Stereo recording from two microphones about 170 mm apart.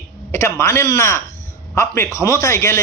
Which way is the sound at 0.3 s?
15° left (ahead or behind).